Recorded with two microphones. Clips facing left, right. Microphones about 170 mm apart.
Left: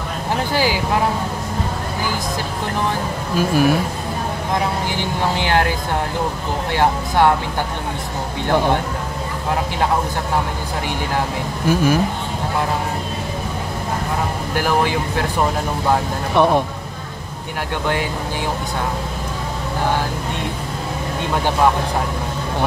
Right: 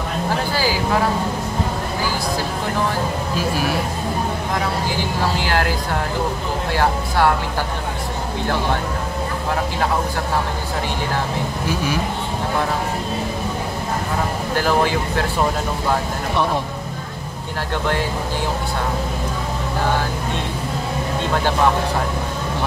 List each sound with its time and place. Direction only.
0.5 s vehicle: 20° left (ahead or behind)
3.3 s speech: 50° left (ahead or behind)
5.4 s speech: 20° left (ahead or behind)
16.4 s speech: 55° left (ahead or behind)